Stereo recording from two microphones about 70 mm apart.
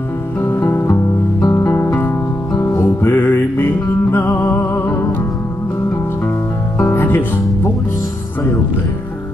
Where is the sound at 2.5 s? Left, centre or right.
Left.